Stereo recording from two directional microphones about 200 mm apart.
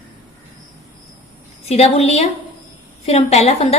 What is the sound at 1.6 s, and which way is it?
A woman's voice, 30° left (ahead or behind).